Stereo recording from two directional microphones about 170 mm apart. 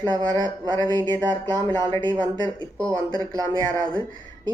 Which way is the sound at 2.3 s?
25° right (ahead or behind).